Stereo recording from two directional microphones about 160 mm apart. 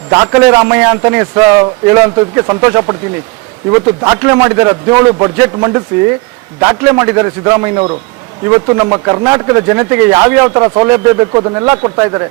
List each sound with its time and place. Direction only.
0.1 s speech: 20° right (ahead or behind)
4.0 s speech: 20° right (ahead or behind)